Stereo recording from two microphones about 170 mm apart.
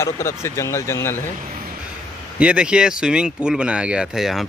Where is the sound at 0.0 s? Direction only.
15° left (ahead or behind).